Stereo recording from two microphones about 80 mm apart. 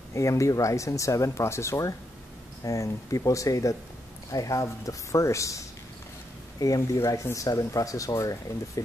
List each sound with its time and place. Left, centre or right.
0.1 s speech: left